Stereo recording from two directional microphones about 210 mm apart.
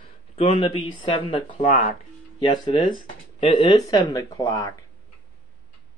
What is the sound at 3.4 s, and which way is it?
Speech, 20° left (ahead or behind).